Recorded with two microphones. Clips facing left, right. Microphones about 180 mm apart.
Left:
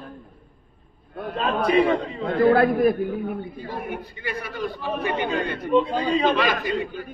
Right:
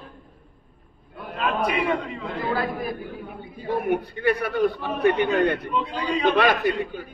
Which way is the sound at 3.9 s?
60° right (ahead or behind).